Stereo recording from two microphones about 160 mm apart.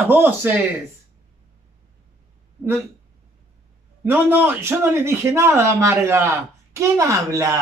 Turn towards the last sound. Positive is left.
turn(degrees=-20)  # may be behind; listen again after turning